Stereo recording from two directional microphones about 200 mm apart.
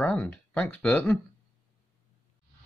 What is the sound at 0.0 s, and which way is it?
Speech, 10° left (ahead or behind).